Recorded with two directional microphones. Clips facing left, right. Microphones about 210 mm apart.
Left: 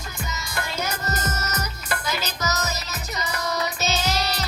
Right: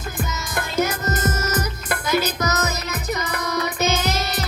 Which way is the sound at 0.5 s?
50° right (ahead or behind).